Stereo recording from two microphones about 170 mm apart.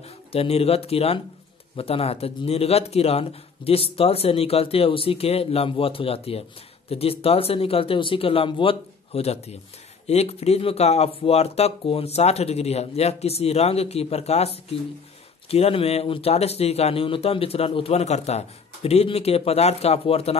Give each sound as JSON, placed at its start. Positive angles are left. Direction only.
{"t": 0.3, "sound": "speech", "side_deg": 35}